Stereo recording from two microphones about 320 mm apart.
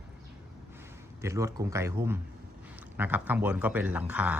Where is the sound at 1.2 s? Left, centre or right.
Centre.